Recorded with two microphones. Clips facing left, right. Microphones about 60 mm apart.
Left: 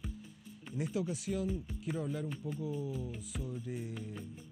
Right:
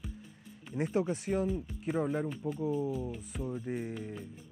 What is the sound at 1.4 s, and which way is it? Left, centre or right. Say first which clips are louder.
Speech: right 4 dB; centre.